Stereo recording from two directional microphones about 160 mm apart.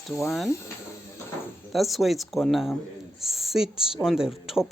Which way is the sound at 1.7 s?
Centre (ahead or behind).